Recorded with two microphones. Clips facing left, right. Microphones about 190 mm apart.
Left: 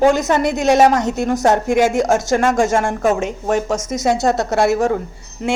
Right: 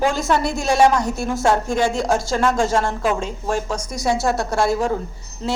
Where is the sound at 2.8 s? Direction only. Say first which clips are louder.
Left 4 dB; 50° left (ahead or behind).